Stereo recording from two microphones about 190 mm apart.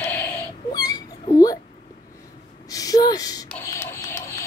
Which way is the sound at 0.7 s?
20° left (ahead or behind).